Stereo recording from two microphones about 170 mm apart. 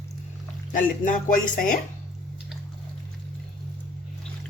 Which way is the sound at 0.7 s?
50° left (ahead or behind).